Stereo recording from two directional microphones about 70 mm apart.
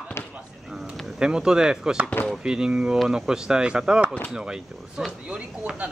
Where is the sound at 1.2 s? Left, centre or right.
Centre.